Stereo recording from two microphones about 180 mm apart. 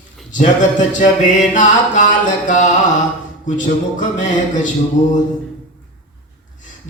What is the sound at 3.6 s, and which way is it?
A man's voice, 45° left (ahead or behind).